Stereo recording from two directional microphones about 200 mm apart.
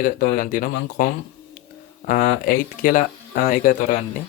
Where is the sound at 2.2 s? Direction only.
45° left (ahead or behind).